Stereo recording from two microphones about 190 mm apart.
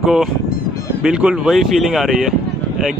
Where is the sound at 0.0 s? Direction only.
Centre (ahead or behind).